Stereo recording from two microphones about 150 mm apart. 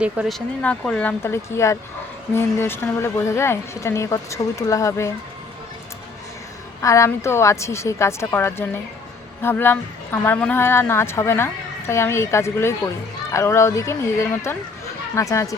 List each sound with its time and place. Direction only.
0.0 s a woman's voice: 5° right (ahead or behind); by 5.1 s 20° left (ahead or behind)
6.8 s a woman's voice: 20° left (ahead or behind)